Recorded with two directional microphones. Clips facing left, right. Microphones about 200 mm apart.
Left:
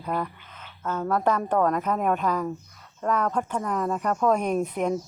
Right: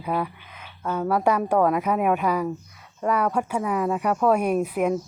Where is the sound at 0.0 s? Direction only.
10° right (ahead or behind).